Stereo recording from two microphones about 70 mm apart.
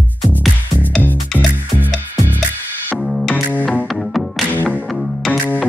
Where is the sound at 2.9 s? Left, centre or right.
Centre.